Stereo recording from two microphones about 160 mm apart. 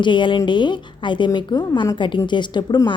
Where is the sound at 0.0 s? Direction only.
30° left (ahead or behind).